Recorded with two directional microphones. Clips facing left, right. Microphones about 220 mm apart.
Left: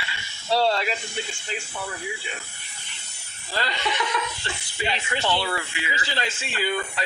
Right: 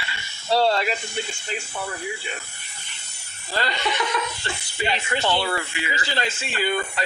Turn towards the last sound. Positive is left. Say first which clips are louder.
# right 2 dB
turn(degrees=-50)  # may be behind; listen again after turning